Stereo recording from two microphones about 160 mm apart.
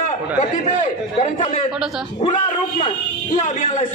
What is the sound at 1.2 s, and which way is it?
A man's voice, 45° left (ahead or behind).